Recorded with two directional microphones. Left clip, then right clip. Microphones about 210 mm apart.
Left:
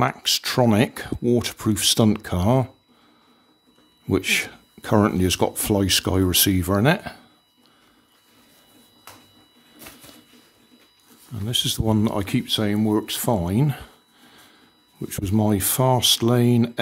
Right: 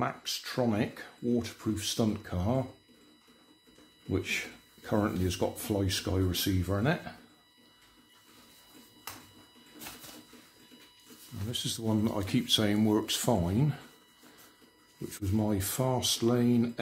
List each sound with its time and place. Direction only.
0.0 s speech: 50° left (ahead or behind)
4.1 s speech: 55° left (ahead or behind)
11.5 s speech: 45° left (ahead or behind)
15.0 s speech: 45° left (ahead or behind)